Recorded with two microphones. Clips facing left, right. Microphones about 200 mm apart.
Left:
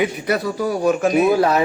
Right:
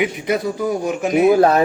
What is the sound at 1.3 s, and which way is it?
Speech, 45° right (ahead or behind).